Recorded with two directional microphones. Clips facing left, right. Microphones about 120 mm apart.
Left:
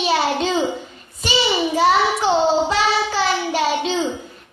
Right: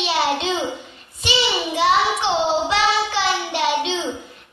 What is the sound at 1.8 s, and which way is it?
Child singing, 40° left (ahead or behind).